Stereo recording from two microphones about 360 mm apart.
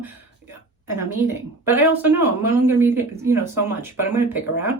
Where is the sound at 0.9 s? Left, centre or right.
Centre.